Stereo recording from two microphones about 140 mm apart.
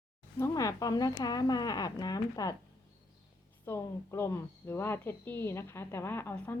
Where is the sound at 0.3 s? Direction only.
20° left (ahead or behind).